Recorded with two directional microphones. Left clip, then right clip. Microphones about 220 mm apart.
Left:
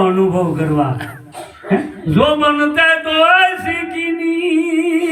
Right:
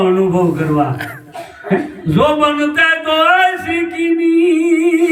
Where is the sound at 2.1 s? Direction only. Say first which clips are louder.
Even; 5° right (ahead or behind).